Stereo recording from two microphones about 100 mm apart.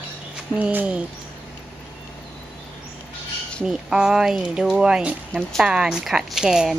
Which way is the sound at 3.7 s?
5° right (ahead or behind).